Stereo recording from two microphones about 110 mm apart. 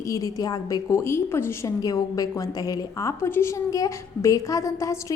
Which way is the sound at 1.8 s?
35° left (ahead or behind).